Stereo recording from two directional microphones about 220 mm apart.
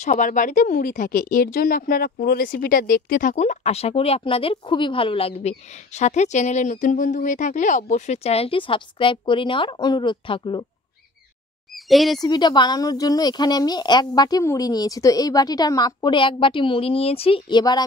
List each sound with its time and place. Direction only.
0.0 s speech: 35° left (ahead or behind)
11.7 s squawk: centre (ahead or behind)
12.2 s speech: 20° left (ahead or behind)